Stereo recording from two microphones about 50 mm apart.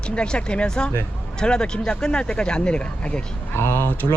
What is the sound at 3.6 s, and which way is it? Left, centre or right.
Speech, left.